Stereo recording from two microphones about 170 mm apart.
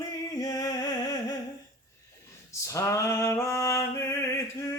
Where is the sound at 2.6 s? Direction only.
20° left (ahead or behind).